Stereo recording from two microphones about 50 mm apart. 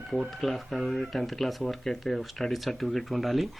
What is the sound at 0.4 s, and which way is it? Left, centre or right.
Speech, centre.